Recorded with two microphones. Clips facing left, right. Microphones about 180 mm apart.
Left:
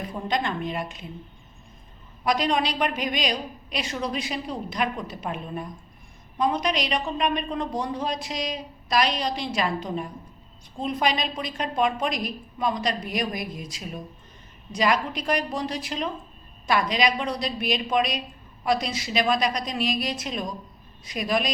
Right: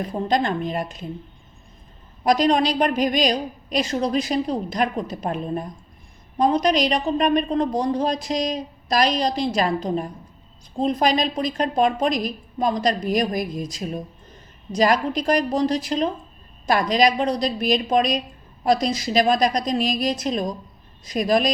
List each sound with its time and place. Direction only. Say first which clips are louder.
0.1 s a woman's voice: right 5 dB; 40° right (ahead or behind)
2.2 s a woman's voice: right 6 dB; 40° right (ahead or behind)